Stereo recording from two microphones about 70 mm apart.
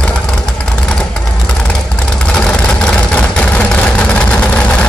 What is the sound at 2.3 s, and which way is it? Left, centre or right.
Vehicle, centre.